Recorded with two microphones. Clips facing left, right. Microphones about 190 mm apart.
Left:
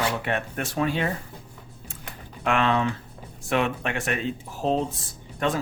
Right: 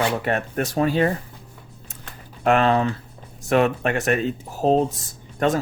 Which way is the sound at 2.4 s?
40° right (ahead or behind).